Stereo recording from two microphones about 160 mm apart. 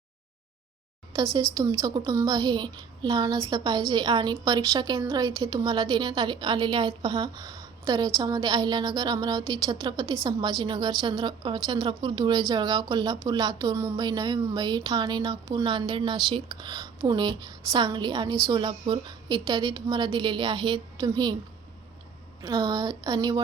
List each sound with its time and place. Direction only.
1.1 s a woman's voice: 25° right (ahead or behind)
22.4 s a woman's voice: 25° right (ahead or behind)